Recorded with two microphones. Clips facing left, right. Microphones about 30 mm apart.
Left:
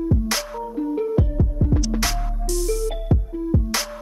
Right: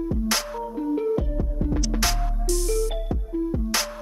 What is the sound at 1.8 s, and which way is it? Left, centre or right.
Music, centre.